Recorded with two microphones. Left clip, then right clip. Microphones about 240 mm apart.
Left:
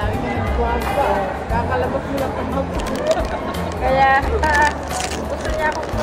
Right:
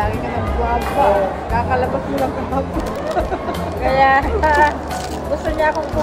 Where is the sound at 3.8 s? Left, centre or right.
Right.